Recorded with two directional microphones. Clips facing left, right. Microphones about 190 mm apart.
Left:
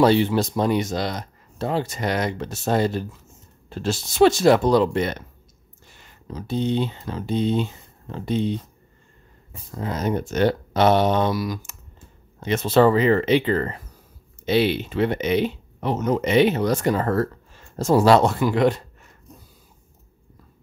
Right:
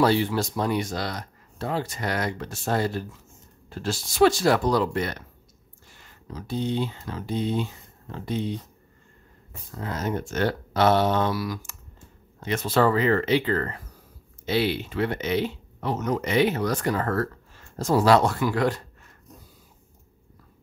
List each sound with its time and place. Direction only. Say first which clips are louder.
0.0 s speech: left 4 dB; 20° left (ahead or behind)
9.7 s speech: left 4 dB; 20° left (ahead or behind)